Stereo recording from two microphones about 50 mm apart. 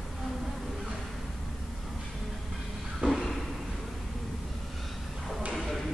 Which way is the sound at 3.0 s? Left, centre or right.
Right.